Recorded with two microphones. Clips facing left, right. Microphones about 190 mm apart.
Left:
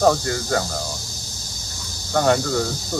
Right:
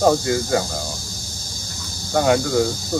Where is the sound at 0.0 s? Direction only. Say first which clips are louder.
Right 1 dB; 10° right (ahead or behind).